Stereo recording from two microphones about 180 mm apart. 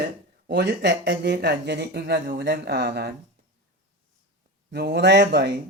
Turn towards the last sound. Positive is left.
turn(degrees=-65)  # may be behind; listen again after turning